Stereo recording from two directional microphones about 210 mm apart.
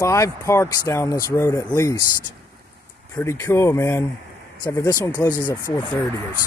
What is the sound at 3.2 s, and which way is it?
Speech, 15° left (ahead or behind).